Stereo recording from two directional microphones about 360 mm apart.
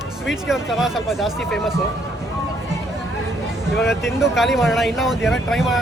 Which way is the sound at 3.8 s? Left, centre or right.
Centre.